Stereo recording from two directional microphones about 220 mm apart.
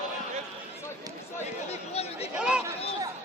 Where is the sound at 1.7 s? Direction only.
30° left (ahead or behind).